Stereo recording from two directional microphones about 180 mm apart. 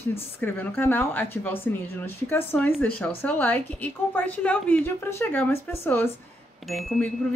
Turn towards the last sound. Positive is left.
turn(degrees=0)  # may be behind; listen again after turning